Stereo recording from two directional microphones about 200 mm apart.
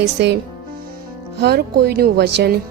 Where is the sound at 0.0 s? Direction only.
55° right (ahead or behind).